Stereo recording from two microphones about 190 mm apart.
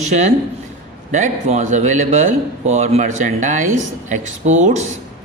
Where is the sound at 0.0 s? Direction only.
35° right (ahead or behind).